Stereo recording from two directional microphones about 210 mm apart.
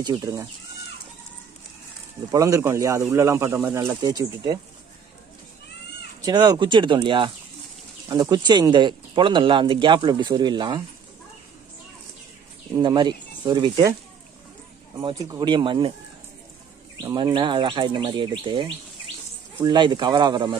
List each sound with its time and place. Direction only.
0.0 s speech: 20° right (ahead or behind)
2.3 s speech: 15° right (ahead or behind)
6.2 s speech: 20° right (ahead or behind)
12.7 s speech: 20° right (ahead or behind)
15.0 s speech: 20° right (ahead or behind)
17.0 s speech: 20° right (ahead or behind)